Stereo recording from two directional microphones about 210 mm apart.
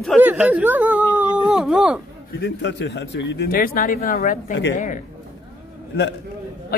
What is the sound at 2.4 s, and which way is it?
Speech, 55° left (ahead or behind).